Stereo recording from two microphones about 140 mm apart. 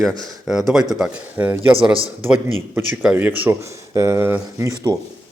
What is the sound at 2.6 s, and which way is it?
Speech, 15° right (ahead or behind).